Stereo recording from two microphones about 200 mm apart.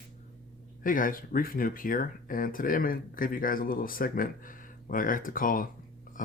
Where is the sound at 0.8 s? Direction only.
45° left (ahead or behind).